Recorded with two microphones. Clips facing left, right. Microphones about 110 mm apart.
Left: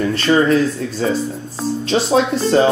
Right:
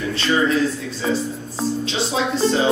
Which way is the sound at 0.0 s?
50° left (ahead or behind).